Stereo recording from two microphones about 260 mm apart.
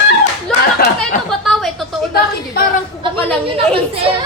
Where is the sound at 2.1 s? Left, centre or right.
Left.